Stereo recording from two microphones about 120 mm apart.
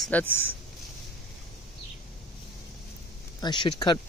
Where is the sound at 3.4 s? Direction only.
40° left (ahead or behind).